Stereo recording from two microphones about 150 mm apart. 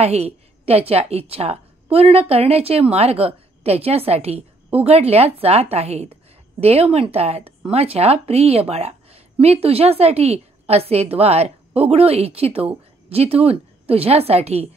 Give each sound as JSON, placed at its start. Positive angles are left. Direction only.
{"t": 0.0, "sound": "a woman's voice", "side_deg": -45}